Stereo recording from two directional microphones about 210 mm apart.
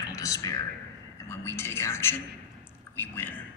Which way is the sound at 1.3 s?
10° left (ahead or behind).